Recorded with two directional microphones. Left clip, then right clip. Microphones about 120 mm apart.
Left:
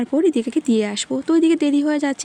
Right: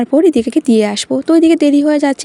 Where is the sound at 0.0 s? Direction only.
40° right (ahead or behind).